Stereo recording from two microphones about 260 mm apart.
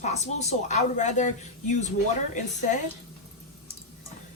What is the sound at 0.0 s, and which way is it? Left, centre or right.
Speech, left.